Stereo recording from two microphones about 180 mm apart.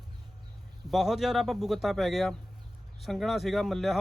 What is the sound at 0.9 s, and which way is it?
Speech, centre (ahead or behind).